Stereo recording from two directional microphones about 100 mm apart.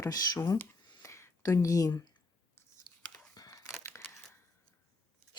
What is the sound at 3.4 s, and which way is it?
Crumpling, 35° left (ahead or behind).